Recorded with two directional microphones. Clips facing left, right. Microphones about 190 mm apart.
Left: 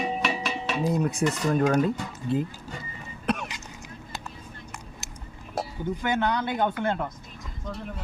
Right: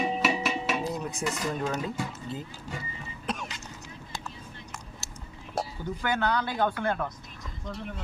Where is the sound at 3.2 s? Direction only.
65° left (ahead or behind).